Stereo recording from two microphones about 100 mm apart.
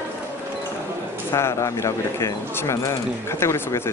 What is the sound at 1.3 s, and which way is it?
Speech, 30° left (ahead or behind).